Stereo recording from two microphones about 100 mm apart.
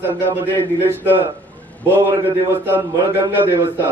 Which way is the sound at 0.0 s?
20° right (ahead or behind).